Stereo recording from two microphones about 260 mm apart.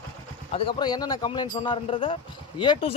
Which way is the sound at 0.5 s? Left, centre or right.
Centre.